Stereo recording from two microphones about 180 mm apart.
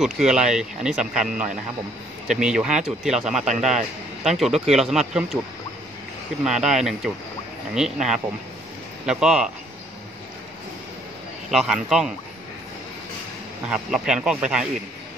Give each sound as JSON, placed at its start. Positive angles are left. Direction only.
{"t": 0.0, "sound": "a man's voice", "side_deg": -5}
{"t": 6.4, "sound": "a man's voice", "side_deg": 0}
{"t": 11.5, "sound": "a man's voice", "side_deg": 0}
{"t": 13.7, "sound": "a man's voice", "side_deg": -5}